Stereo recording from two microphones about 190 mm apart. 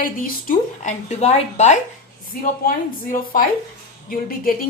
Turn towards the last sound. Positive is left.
turn(degrees=50)  # may be behind; listen again after turning